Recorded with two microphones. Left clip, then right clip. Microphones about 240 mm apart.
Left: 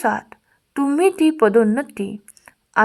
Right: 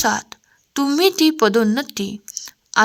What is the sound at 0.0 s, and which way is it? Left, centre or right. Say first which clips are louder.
A woman's voice: right 1 dB; right.